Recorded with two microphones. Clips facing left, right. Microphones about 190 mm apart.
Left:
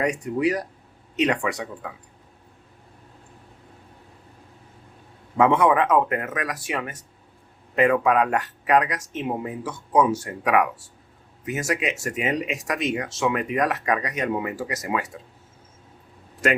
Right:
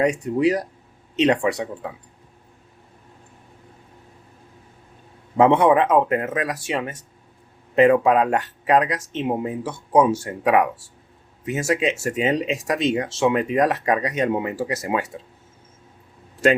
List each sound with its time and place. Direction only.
0.0 s speech: 25° right (ahead or behind)
5.4 s speech: 30° right (ahead or behind)